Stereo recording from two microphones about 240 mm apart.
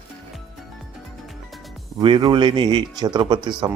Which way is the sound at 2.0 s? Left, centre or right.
Centre.